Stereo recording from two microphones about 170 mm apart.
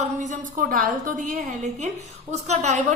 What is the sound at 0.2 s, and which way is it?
A woman's voice, 50° right (ahead or behind).